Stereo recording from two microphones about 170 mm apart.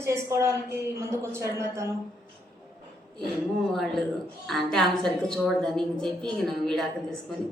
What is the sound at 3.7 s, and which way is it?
A woman's voice, centre (ahead or behind).